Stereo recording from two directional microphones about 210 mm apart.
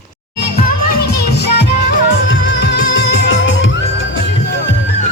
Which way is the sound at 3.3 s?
65° left (ahead or behind).